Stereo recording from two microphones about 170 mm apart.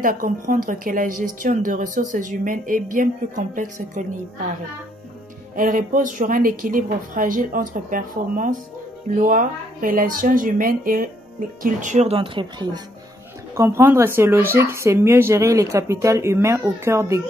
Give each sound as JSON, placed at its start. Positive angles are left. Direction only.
{"t": 0.0, "sound": "speech", "side_deg": -55}
{"t": 5.6, "sound": "speech", "side_deg": -55}
{"t": 13.6, "sound": "speech", "side_deg": -15}